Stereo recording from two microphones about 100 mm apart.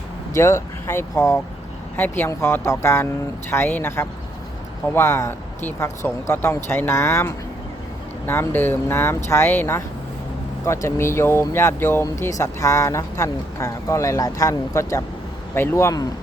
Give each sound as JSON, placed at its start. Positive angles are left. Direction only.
{"t": 0.3, "sound": "speech", "side_deg": 30}